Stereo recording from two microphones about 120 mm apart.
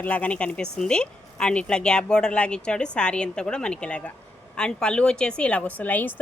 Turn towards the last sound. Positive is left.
turn(degrees=15)  # may be behind; listen again after turning